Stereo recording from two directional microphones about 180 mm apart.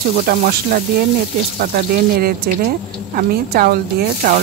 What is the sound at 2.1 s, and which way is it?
Speech, 60° right (ahead or behind).